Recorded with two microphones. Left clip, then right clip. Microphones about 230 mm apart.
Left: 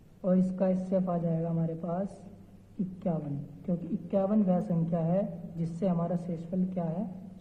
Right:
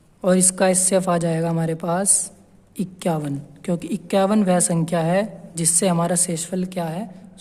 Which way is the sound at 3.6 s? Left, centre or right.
Right.